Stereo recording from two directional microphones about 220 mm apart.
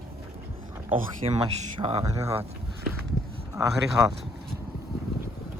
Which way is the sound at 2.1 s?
15° right (ahead or behind).